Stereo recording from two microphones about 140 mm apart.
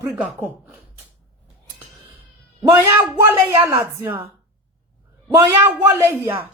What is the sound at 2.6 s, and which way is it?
A woman's voice, 20° right (ahead or behind).